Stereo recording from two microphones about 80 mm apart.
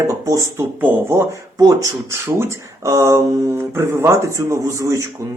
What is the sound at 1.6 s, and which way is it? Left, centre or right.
Speech, right.